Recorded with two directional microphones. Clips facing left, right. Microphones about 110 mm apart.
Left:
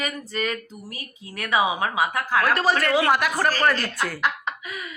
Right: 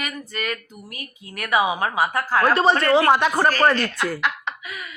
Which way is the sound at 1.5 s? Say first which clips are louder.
Right 1 dB; 25° left (ahead or behind).